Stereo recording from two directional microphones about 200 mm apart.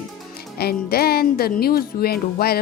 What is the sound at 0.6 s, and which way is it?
Speech, 50° left (ahead or behind).